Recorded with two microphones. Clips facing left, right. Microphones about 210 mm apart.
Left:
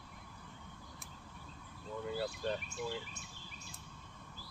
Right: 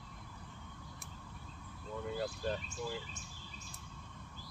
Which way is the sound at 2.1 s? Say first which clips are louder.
Even; 5° left (ahead or behind).